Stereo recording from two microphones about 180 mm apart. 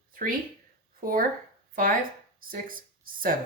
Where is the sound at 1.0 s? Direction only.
50° right (ahead or behind).